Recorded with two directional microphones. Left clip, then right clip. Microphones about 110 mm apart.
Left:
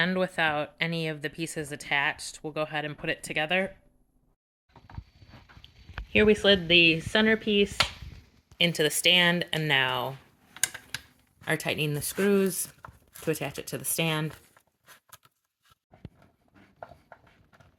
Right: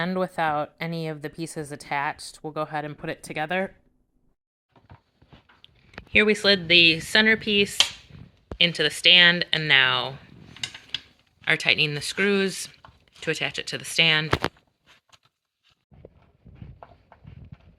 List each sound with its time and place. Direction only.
0.2 s a woman's voice: 20° right (ahead or behind)
6.1 s a sound: 5° left (ahead or behind)
8.5 s speech: 20° left (ahead or behind)
11.4 s speech: 30° left (ahead or behind)